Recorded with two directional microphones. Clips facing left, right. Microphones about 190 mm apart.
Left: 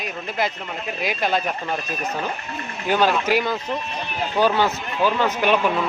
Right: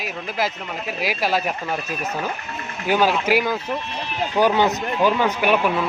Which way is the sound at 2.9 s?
10° right (ahead or behind).